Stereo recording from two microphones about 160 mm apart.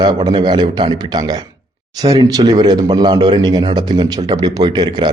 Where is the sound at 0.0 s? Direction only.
30° right (ahead or behind).